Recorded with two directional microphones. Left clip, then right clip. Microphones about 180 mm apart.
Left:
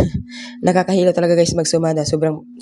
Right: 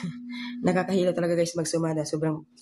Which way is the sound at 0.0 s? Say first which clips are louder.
Left 14 dB; 40° left (ahead or behind).